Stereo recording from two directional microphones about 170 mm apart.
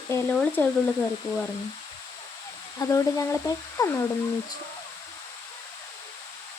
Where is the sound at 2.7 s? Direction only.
20° left (ahead or behind).